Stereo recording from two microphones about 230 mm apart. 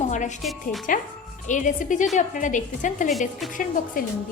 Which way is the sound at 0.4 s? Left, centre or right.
Centre.